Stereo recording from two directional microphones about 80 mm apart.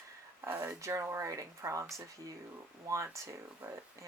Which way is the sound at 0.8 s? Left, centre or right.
Right.